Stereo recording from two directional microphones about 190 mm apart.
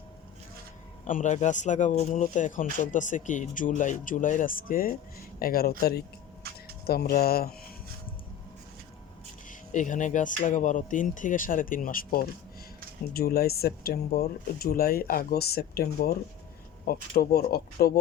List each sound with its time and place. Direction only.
1.0 s speech: 40° left (ahead or behind)
6.8 s speech: 55° left (ahead or behind)
9.5 s speech: 45° left (ahead or behind)